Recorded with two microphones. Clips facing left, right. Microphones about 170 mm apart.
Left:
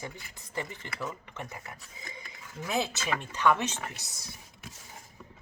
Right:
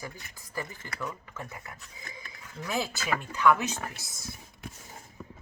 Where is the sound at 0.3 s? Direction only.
25° left (ahead or behind).